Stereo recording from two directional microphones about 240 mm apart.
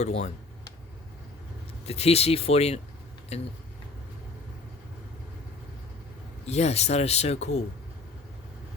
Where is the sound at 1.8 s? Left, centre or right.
Left.